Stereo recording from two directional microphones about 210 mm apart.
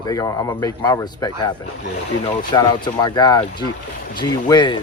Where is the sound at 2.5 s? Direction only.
20° left (ahead or behind).